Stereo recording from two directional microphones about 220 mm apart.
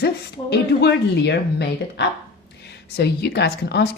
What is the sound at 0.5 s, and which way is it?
Speech, 50° left (ahead or behind).